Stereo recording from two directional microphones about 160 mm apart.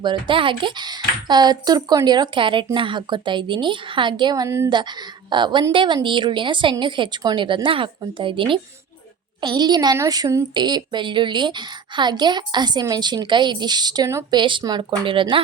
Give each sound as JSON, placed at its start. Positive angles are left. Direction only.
{"t": 0.0, "sound": "a woman's voice", "side_deg": -30}
{"t": 4.7, "sound": "a woman's voice", "side_deg": -25}